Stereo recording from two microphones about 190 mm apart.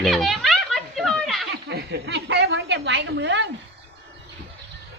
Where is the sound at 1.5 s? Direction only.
60° right (ahead or behind).